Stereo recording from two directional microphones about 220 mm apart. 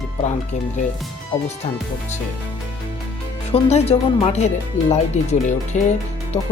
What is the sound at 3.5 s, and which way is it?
Speech, 30° left (ahead or behind).